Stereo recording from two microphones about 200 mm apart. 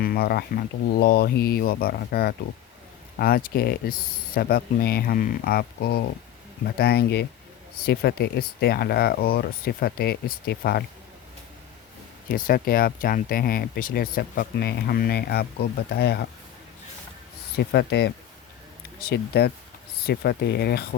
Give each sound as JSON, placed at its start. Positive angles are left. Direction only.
{"t": 0.0, "sound": "speech", "side_deg": 50}
{"t": 12.3, "sound": "speech", "side_deg": 45}
{"t": 17.6, "sound": "speech", "side_deg": 55}